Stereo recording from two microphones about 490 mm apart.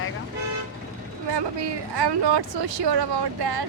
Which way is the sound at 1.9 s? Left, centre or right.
Right.